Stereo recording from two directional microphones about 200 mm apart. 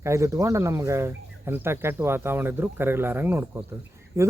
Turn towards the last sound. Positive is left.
turn(degrees=-15)  # may be behind; listen again after turning